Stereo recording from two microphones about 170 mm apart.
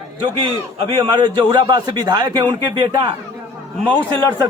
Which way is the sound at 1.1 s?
25° right (ahead or behind).